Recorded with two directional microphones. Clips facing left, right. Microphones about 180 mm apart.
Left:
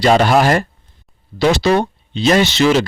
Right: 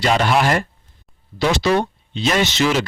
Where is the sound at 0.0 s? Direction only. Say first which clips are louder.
Left 5 dB; 40° left (ahead or behind).